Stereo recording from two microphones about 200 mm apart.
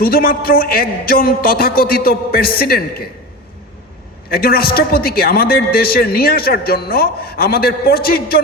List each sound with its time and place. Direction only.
0.0 s a man's voice: 50° left (ahead or behind)
4.3 s a man's voice: 50° left (ahead or behind)